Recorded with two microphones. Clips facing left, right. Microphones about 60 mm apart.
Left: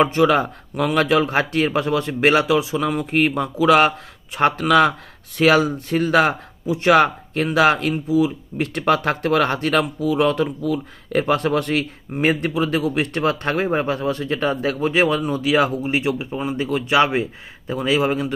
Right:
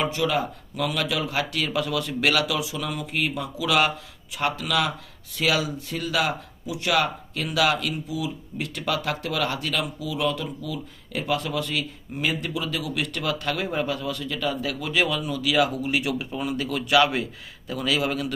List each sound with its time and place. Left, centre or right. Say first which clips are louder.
0.0 s speech: left 8 dB; left